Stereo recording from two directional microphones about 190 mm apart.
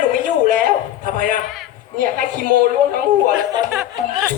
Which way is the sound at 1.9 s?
45° right (ahead or behind).